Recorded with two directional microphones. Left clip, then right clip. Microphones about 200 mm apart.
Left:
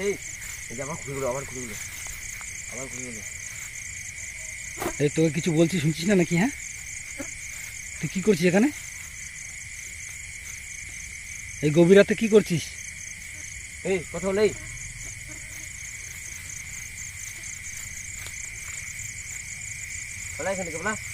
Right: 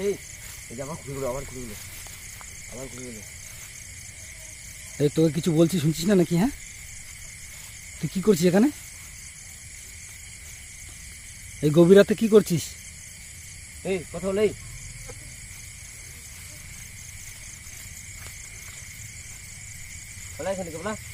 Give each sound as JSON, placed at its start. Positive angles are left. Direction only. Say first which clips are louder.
{"t": 0.8, "sound": "speech", "louder": "left 1 dB", "side_deg": 0}
{"t": 4.9, "sound": "speech", "louder": "right 2 dB", "side_deg": -15}
{"t": 8.0, "sound": "speech", "louder": "right 1 dB", "side_deg": -15}
{"t": 11.6, "sound": "speech", "louder": "right 1 dB", "side_deg": -20}
{"t": 13.8, "sound": "speech", "louder": "left 1 dB", "side_deg": 10}
{"t": 20.4, "sound": "speech", "louder": "left 1 dB", "side_deg": 0}